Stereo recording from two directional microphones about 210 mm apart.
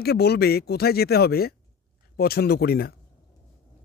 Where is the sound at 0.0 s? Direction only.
50° left (ahead or behind).